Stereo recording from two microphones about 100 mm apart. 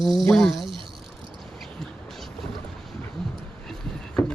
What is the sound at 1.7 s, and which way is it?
Music, 5° left (ahead or behind).